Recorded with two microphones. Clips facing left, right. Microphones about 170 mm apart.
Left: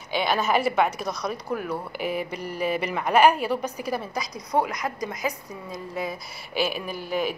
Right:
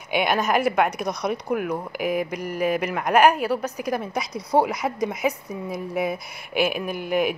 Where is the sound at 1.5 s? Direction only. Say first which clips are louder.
Right 4 dB; 10° right (ahead or behind); by 5.1 s 25° right (ahead or behind).